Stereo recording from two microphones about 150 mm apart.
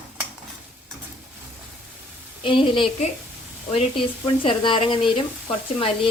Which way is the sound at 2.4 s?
35° left (ahead or behind).